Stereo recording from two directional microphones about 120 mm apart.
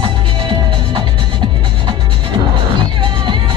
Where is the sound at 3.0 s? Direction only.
45° right (ahead or behind).